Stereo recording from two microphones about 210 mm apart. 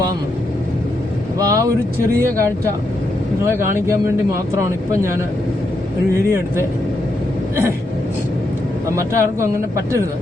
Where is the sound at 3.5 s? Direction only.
10° right (ahead or behind).